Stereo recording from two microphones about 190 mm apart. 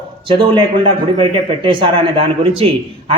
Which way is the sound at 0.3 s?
30° right (ahead or behind).